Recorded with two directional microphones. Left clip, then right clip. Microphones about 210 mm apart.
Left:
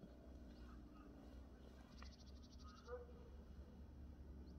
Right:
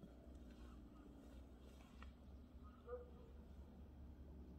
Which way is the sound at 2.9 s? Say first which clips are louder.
Right 1 dB; 50° right (ahead or behind).